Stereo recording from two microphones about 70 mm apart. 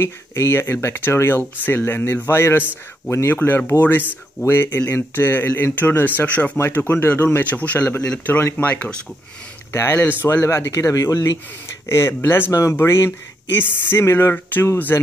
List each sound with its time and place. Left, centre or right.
0.0 s speech: left; by 9.0 s centre
9.7 s speech: left